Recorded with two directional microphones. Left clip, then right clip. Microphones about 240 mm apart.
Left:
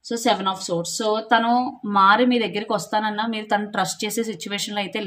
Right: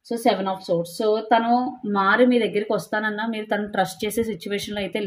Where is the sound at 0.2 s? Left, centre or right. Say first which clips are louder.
Even; left.